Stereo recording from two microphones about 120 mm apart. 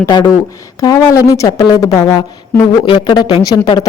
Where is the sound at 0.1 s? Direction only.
35° left (ahead or behind).